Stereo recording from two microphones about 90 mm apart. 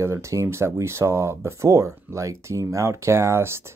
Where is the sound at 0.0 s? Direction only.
30° right (ahead or behind).